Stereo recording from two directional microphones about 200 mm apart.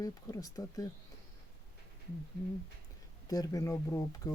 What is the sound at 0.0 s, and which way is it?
Speech, 15° left (ahead or behind).